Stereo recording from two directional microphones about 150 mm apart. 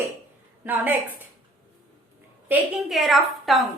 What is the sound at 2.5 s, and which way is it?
A woman's voice, centre (ahead or behind).